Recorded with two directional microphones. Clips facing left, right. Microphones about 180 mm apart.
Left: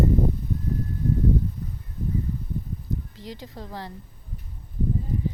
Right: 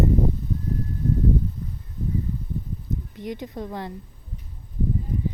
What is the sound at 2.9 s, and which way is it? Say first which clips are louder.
Speech: right 3 dB; 20° right (ahead or behind).